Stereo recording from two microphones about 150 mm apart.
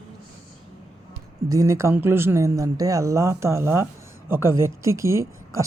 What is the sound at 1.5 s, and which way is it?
Speech, 20° right (ahead or behind).